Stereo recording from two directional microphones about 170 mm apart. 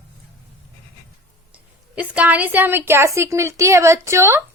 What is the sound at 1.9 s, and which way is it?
A woman's voice, 10° right (ahead or behind).